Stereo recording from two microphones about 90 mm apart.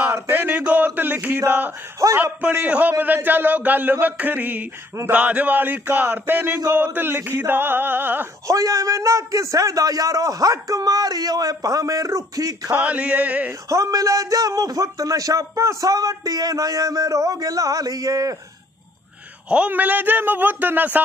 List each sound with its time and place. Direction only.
0.1 s chant: 25° right (ahead or behind)
1.4 s a man's voice: 25° right (ahead or behind)
2.0 s speech: 35° right (ahead or behind)
2.5 s a man's voice: 20° right (ahead or behind)
8.5 s speech: 35° right (ahead or behind)
12.7 s a sound: 15° right (ahead or behind)
13.5 s speech: 35° right (ahead or behind)
19.5 s a man's voice: 15° right (ahead or behind)